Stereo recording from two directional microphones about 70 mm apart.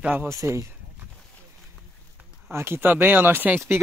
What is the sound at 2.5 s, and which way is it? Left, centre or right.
Speech, right.